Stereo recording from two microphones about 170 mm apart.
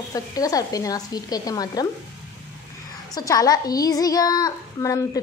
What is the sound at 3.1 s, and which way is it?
Speech, 20° left (ahead or behind).